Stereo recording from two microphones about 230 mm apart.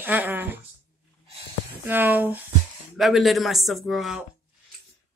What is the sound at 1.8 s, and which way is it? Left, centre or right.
Speech, centre.